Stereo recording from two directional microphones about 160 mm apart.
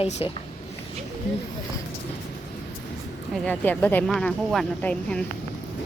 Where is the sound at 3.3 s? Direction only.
5° left (ahead or behind).